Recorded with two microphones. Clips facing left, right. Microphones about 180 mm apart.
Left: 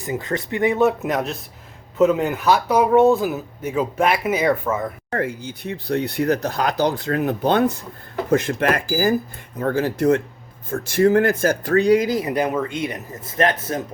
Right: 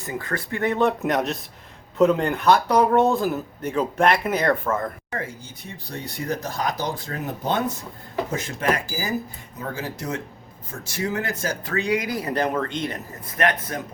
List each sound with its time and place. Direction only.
0.0 s speech: 20° left (ahead or behind)
5.1 s speech: 60° left (ahead or behind)
11.7 s speech: 35° left (ahead or behind)
12.0 s speech: 20° left (ahead or behind)
12.3 s speech: 10° left (ahead or behind)
13.3 s speech: 30° left (ahead or behind)